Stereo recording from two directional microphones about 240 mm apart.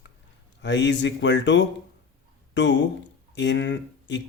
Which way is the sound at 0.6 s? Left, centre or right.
Left.